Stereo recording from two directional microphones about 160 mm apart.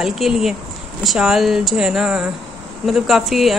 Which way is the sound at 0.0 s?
Centre (ahead or behind).